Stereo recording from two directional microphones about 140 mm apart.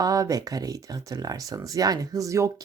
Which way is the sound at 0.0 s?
25° right (ahead or behind).